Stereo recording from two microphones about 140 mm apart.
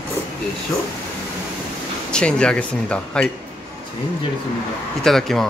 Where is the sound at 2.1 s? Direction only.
5° left (ahead or behind).